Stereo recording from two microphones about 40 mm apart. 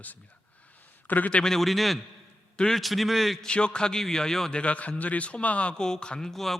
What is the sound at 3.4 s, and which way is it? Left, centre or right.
A man's voice, left.